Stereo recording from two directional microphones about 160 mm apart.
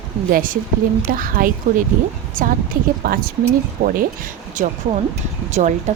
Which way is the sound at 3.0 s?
70° right (ahead or behind).